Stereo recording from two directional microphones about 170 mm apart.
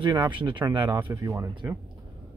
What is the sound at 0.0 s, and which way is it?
Speech, 25° right (ahead or behind).